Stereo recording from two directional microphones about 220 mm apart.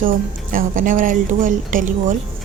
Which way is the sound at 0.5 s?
35° right (ahead or behind).